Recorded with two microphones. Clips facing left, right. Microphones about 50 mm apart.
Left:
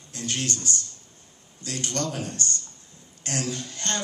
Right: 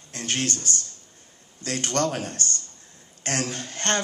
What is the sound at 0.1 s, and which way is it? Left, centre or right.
A man's voice, right.